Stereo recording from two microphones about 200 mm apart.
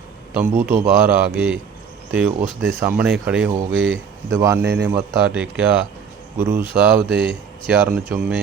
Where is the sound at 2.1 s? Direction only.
5° right (ahead or behind).